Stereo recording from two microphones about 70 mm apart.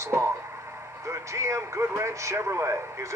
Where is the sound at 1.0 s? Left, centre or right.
Right.